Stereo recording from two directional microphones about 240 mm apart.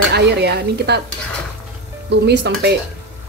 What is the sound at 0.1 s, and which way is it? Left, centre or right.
Speech, right.